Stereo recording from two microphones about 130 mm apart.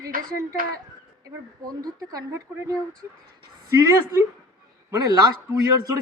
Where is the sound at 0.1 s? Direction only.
90° right.